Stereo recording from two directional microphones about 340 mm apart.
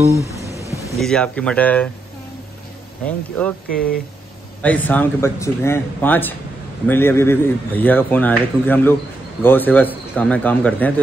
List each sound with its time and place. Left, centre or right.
0.0 s speech: centre
0.3 s speech: centre
3.1 s speech: centre
3.6 s speech: left
4.6 s speech: centre